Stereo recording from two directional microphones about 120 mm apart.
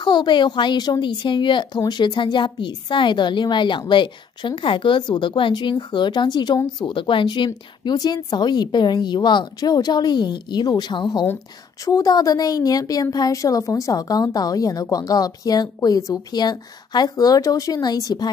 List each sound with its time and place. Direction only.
0.0 s a woman's voice: 40° left (ahead or behind)